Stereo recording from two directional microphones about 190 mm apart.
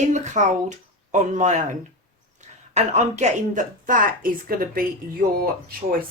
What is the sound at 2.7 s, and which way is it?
Speech, 40° right (ahead or behind).